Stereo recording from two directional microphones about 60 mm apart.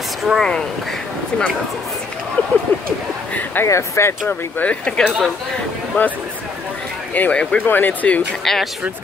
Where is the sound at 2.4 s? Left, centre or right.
Left.